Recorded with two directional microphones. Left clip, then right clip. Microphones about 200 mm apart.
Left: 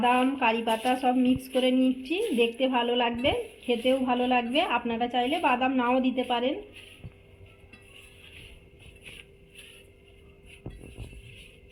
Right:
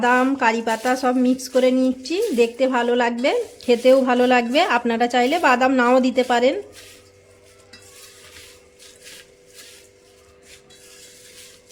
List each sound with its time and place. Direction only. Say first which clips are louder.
0.0 s a woman's voice: right 6 dB; 45° right (ahead or behind); by 6.6 s 65° right (ahead or behind)